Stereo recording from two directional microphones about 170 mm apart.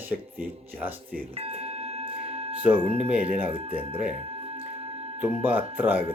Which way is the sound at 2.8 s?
35° right (ahead or behind).